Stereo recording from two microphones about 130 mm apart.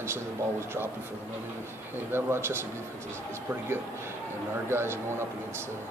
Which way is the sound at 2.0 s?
20° right (ahead or behind).